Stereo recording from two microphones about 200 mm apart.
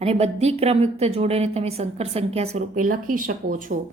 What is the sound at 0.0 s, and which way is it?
A woman's voice, 30° right (ahead or behind).